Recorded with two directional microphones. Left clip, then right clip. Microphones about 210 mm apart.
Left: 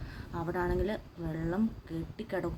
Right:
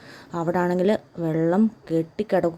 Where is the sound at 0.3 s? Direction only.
30° right (ahead or behind).